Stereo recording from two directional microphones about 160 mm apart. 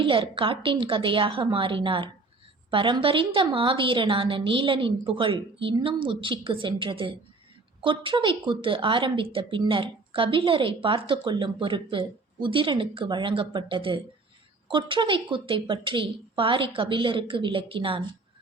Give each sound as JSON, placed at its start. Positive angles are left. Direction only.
{"t": 0.0, "sound": "speech", "side_deg": -30}